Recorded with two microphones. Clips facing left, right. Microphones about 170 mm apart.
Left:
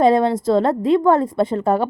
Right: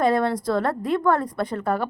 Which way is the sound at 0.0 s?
20° left (ahead or behind).